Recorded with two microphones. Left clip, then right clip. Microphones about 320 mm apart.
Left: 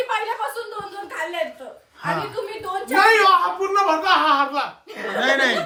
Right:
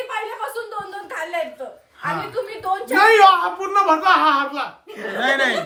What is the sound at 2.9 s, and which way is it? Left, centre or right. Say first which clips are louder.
Speech: right 2 dB; right.